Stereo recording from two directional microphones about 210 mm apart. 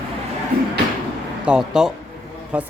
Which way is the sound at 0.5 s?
45° right (ahead or behind).